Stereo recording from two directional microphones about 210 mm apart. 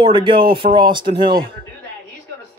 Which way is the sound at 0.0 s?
25° right (ahead or behind).